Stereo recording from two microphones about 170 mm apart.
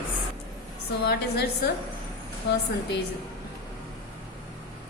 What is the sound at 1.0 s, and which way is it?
Speech, 70° left (ahead or behind).